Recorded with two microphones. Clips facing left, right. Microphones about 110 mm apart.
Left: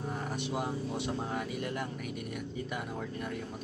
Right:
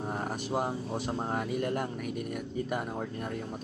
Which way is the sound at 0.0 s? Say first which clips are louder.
Right 2 dB; 45° right (ahead or behind).